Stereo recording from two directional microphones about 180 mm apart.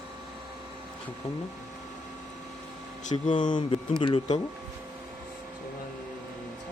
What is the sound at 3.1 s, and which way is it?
Speech, 45° left (ahead or behind).